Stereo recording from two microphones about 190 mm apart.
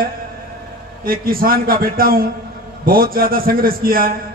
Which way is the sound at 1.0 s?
50° right (ahead or behind).